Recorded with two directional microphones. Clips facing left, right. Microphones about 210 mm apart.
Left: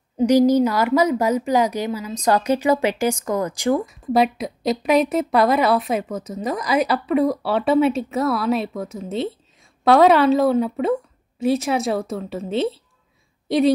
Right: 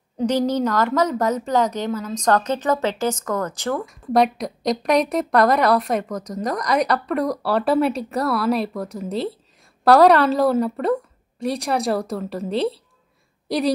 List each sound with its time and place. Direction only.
0.2 s a woman's voice: 10° left (ahead or behind)